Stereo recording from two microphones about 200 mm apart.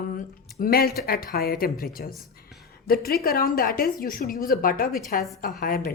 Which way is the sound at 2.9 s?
50° left (ahead or behind).